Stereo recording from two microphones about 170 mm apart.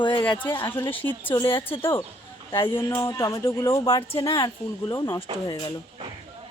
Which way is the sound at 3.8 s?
30° left (ahead or behind).